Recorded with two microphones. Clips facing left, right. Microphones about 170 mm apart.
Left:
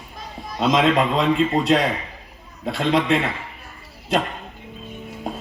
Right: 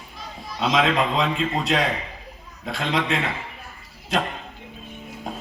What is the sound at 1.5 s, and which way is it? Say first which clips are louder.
Speech: left 4 dB; 35° left (ahead or behind).